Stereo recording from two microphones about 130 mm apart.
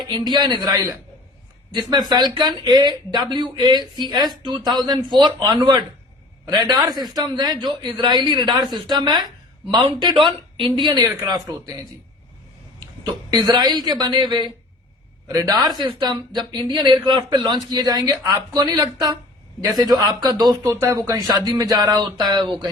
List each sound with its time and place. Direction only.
0.0 s a man's voice: 35° right (ahead or behind)
13.3 s a man's voice: 35° right (ahead or behind)